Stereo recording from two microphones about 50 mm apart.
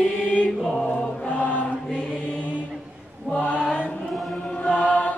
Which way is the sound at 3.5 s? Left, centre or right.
Left.